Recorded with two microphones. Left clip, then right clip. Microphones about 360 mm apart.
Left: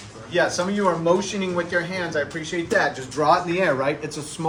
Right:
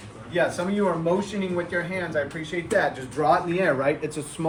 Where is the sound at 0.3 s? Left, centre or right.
Left.